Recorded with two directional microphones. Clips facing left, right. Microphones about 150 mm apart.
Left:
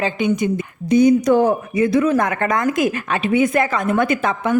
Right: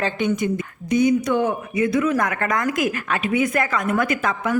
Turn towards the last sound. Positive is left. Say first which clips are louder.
# left 4 dB
turn(degrees=25)  # may be behind; listen again after turning